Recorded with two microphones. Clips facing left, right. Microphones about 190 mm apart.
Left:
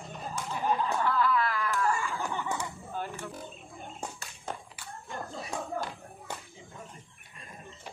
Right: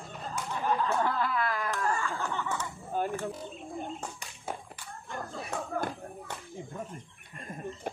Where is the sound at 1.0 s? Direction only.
45° right (ahead or behind).